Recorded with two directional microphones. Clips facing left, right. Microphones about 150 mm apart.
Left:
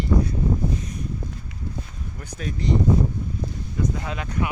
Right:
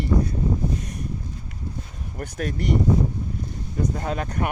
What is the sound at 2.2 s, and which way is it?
Speech, 55° right (ahead or behind).